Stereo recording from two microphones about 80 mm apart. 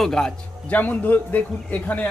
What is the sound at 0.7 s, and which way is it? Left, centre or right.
A man's voice, left.